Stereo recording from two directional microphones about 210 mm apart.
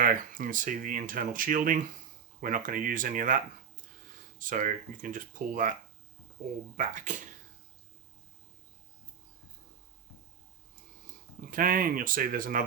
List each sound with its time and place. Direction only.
0.0 s speech: 40° right (ahead or behind)
6.7 s speech: 35° right (ahead or behind)
11.5 s speech: 40° right (ahead or behind)